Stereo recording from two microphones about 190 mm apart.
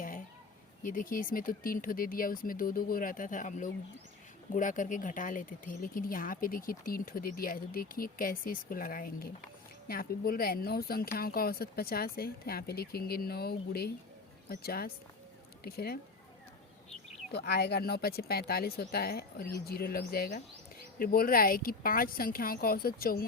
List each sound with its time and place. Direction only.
0.8 s speech: 45° left (ahead or behind)
17.3 s speech: 60° left (ahead or behind)